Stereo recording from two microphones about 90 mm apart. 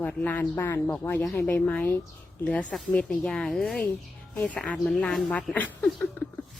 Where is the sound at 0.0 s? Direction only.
15° left (ahead or behind).